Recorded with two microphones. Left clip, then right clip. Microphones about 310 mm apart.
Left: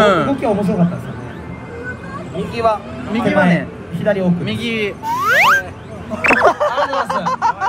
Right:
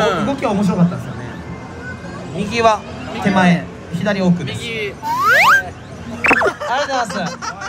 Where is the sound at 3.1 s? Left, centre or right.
Left.